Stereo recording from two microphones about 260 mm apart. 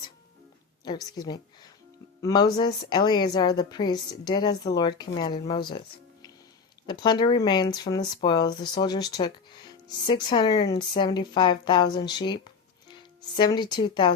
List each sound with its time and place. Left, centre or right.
0.9 s speech: centre
6.8 s speech: centre